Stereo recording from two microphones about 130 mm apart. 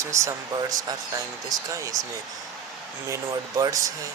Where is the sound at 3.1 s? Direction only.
25° right (ahead or behind).